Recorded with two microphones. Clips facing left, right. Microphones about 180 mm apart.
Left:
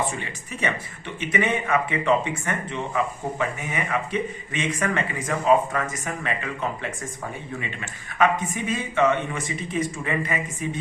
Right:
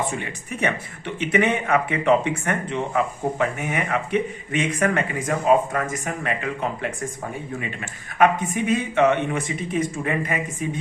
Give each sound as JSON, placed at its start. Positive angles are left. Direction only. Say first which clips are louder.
{"t": 0.2, "sound": "speech", "louder": "right 3 dB", "side_deg": -55}